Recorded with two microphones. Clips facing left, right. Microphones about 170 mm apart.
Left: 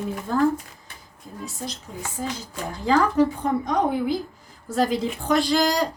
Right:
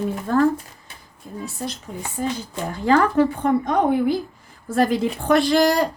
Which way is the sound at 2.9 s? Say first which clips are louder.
Right 2 dB; 55° right (ahead or behind).